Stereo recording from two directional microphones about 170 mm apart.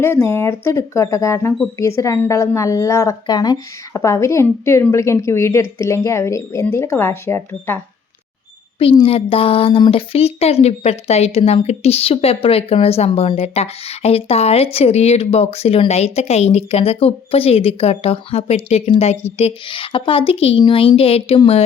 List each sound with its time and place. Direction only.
0.0 s a woman's voice: 15° left (ahead or behind)
9.0 s speech: 35° left (ahead or behind)